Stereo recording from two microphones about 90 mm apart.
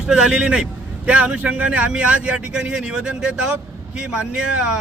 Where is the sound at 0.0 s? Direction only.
10° right (ahead or behind).